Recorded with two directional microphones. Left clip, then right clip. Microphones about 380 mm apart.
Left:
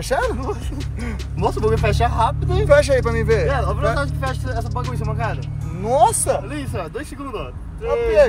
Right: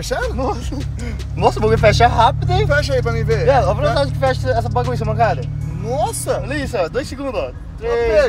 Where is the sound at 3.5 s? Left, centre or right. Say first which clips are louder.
Right 7 dB; right.